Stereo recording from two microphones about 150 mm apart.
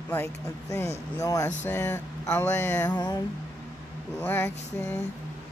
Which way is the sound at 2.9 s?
30° left (ahead or behind).